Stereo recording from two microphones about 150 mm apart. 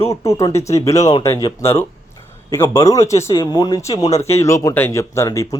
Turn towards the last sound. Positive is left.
turn(degrees=20)  # may be behind; listen again after turning